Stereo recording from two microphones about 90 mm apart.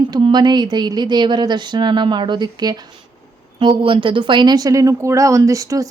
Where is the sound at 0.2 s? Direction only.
55° right (ahead or behind).